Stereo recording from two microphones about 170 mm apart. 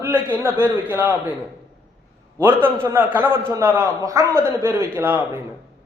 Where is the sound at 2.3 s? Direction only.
15° right (ahead or behind).